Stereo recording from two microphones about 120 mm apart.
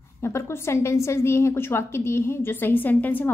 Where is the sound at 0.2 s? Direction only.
20° left (ahead or behind).